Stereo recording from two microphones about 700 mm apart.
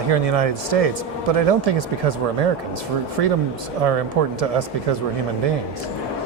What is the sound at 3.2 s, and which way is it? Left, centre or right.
Speech, right.